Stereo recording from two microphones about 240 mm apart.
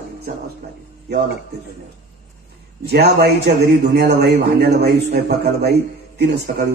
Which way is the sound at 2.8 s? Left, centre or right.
Right.